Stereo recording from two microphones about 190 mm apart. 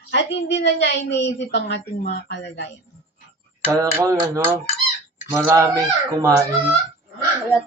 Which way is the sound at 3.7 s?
15° right (ahead or behind).